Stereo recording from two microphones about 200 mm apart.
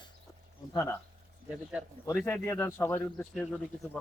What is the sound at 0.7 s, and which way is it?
Speech, 15° left (ahead or behind).